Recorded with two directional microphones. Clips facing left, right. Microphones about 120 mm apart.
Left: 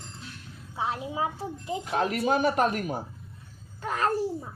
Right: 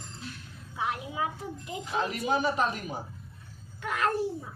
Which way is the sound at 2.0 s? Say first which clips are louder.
Left 3 dB; 55° left (ahead or behind).